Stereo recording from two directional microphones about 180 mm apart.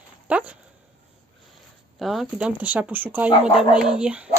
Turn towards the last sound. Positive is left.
turn(degrees=-5)  # may be behind; listen again after turning